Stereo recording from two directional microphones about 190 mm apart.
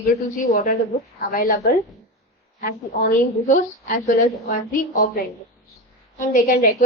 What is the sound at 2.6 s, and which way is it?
A woman's voice, 45° left (ahead or behind).